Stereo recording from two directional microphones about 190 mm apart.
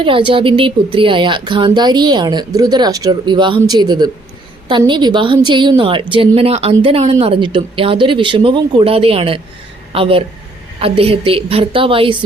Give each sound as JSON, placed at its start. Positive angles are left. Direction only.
{"t": 0.0, "sound": "a woman's voice", "side_deg": -25}